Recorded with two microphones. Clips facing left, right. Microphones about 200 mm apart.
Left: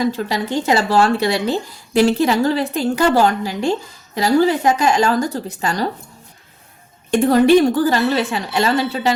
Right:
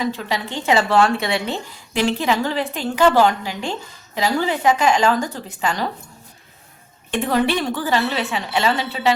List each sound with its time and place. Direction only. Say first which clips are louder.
0.0 s speech: left 4 dB; 40° left (ahead or behind)
7.1 s speech: left 8 dB; 45° left (ahead or behind)